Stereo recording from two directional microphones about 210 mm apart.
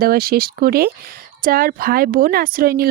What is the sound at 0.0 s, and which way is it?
A woman's voice, 45° right (ahead or behind).